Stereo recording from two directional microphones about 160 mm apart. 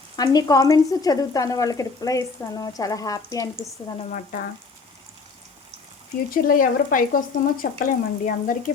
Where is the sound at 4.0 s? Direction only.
55° left (ahead or behind).